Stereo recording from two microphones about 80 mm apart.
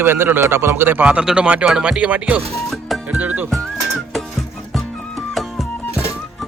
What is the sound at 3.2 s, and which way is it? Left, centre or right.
Speech, right.